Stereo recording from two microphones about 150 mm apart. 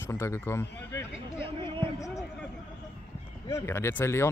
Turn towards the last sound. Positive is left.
turn(degrees=15)  # may be behind; listen again after turning